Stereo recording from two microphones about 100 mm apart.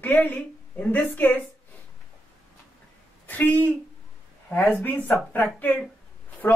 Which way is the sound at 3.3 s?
15° left (ahead or behind).